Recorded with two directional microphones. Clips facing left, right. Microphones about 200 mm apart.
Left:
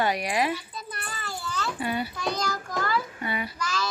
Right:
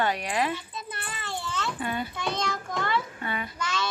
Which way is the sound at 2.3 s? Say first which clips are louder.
Left 1 dB; 25° right (ahead or behind).